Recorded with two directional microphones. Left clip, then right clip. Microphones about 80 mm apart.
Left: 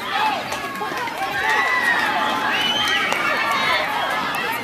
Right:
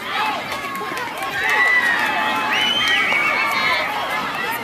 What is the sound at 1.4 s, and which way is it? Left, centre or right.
Run, right.